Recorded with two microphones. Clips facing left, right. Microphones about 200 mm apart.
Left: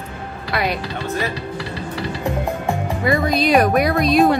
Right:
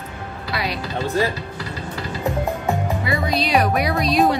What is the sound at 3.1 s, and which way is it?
Speech, 50° left (ahead or behind).